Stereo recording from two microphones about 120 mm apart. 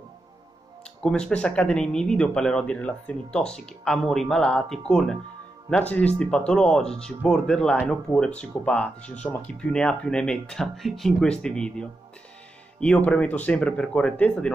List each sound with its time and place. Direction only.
1.0 s speech: 5° left (ahead or behind)